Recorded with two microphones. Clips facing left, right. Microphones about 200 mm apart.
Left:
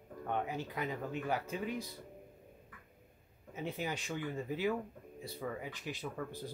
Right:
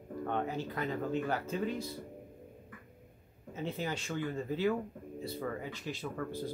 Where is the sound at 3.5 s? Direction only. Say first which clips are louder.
Right 2 dB; 10° left (ahead or behind).